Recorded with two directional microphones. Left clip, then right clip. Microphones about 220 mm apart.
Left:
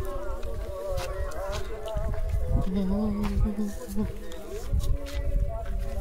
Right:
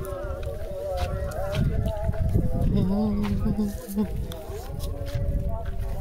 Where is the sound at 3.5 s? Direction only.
30° right (ahead or behind).